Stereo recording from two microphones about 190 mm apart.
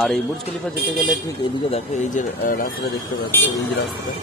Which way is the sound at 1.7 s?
40° left (ahead or behind).